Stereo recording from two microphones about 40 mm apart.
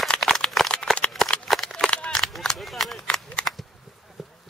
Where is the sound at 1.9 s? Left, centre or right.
Left.